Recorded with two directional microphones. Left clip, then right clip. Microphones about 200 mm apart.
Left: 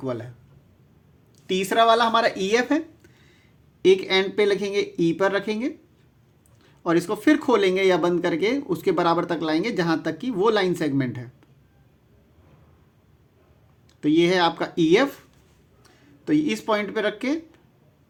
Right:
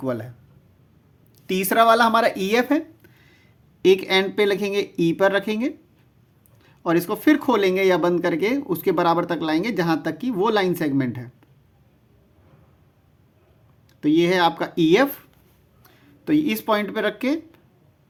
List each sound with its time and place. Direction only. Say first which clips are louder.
0.0 s speech: right 3 dB; 35° right (ahead or behind)
1.5 s speech: right 2 dB; 35° right (ahead or behind); by 11.3 s 15° right (ahead or behind)
14.0 s speech: right 1 dB; 20° right (ahead or behind)